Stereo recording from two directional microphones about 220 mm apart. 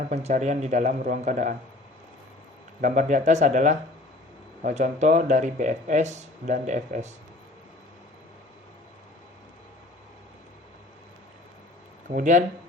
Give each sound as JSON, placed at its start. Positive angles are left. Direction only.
{"t": 0.1, "sound": "speech", "side_deg": -30}
{"t": 2.8, "sound": "speech", "side_deg": -35}
{"t": 12.1, "sound": "speech", "side_deg": -35}